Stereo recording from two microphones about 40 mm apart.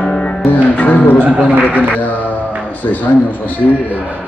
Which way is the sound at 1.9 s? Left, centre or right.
Left.